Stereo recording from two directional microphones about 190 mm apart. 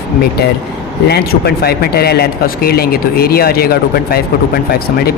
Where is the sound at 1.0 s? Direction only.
60° left (ahead or behind).